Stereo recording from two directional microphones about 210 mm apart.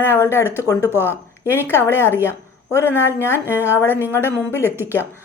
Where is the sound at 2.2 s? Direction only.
15° left (ahead or behind).